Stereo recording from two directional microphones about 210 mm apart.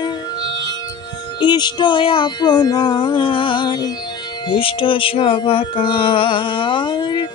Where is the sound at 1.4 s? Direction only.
20° left (ahead or behind).